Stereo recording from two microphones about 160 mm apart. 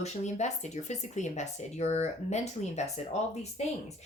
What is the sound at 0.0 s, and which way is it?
Speech, 45° left (ahead or behind).